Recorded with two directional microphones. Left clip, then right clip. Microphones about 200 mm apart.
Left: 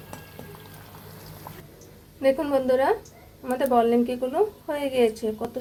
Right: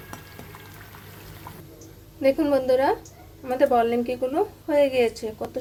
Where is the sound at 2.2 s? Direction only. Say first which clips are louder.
Right 1 dB; centre (ahead or behind).